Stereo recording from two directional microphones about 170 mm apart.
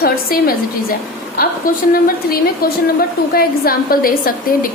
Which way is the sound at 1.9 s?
60° left (ahead or behind).